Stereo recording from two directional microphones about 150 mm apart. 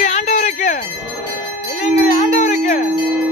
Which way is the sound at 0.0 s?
50° left (ahead or behind).